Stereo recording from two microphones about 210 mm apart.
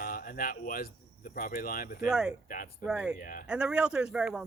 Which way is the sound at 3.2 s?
40° left (ahead or behind).